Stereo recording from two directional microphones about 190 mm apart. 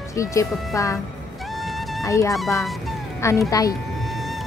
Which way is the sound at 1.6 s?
Centre (ahead or behind).